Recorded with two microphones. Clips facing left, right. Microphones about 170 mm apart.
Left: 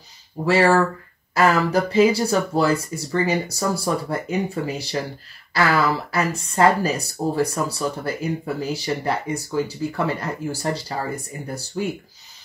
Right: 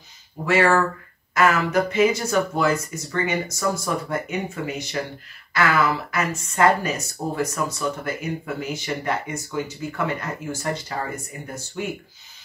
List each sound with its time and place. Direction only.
0.5 s speech: 30° left (ahead or behind)